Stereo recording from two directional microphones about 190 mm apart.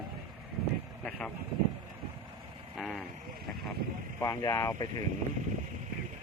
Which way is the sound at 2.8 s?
5° left (ahead or behind).